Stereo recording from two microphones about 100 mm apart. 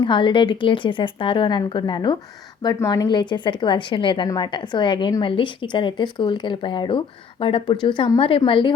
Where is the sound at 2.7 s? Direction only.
35° left (ahead or behind); by 7.6 s 65° left (ahead or behind).